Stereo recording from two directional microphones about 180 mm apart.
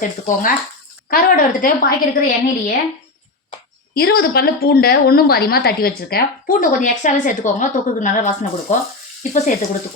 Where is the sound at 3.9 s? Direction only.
60° left (ahead or behind); by 9.5 s 40° left (ahead or behind).